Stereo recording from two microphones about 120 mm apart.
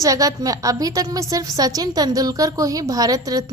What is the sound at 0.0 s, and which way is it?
A woman's voice, 30° right (ahead or behind).